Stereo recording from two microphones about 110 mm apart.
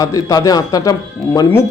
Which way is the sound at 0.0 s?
30° left (ahead or behind).